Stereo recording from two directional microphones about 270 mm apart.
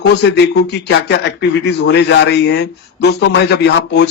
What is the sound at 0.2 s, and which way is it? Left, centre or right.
Speech, left.